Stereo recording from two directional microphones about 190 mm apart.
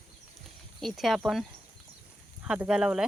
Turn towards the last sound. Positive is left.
turn(degrees=-5)  # may be behind; listen again after turning